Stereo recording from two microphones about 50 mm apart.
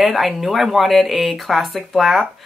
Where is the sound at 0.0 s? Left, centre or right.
Centre.